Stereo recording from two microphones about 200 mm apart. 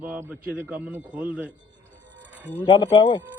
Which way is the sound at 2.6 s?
25° left (ahead or behind).